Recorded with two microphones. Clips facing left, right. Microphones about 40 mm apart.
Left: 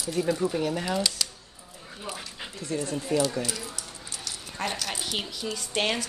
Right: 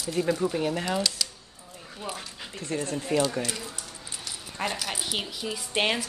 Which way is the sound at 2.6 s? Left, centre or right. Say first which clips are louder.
Even; right.